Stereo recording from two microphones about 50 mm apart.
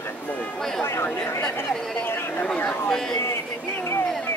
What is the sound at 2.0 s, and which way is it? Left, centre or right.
Chatter, left.